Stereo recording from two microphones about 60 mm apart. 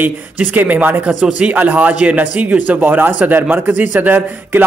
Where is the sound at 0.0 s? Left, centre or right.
Right.